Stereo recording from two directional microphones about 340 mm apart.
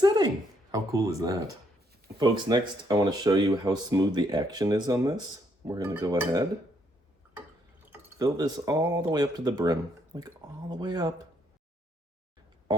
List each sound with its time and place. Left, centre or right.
0.0 s a sound: centre
0.7 s speech: centre
7.9 s speech: centre